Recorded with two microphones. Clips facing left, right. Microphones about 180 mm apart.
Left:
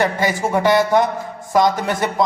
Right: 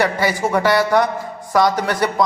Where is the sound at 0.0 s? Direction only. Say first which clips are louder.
Even; 20° left (ahead or behind).